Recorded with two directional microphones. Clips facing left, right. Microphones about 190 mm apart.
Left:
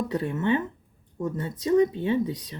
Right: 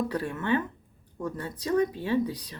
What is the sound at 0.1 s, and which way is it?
Speech, 25° left (ahead or behind).